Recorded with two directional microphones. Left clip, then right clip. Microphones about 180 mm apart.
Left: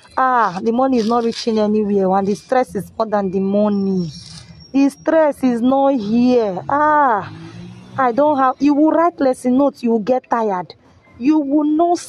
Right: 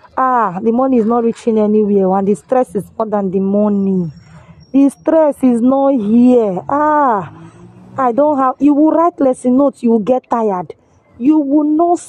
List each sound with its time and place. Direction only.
0.1 s speech: 30° right (ahead or behind)